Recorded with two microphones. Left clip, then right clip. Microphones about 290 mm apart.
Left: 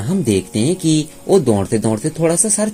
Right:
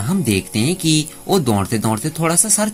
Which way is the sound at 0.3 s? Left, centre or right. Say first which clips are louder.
Left 3 dB; right.